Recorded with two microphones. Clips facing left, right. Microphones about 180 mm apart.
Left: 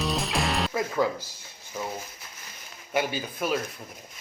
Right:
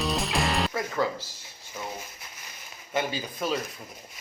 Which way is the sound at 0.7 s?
15° left (ahead or behind).